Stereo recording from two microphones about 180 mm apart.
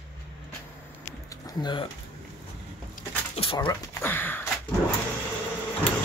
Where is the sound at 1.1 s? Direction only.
20° left (ahead or behind).